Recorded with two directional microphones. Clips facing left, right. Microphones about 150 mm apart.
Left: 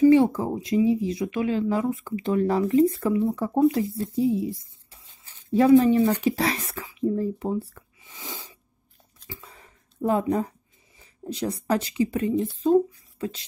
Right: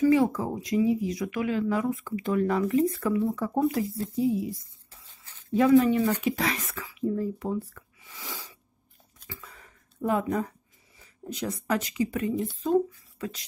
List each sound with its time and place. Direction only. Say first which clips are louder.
0.0 s a woman's voice: left 5 dB; 30° left (ahead or behind)
9.3 s a sound: left 2 dB; 30° left (ahead or behind)
11.2 s a woman's voice: left 4 dB; 30° left (ahead or behind)